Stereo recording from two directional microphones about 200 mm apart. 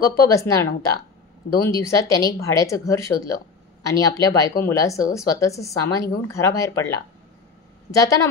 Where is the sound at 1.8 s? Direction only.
15° left (ahead or behind).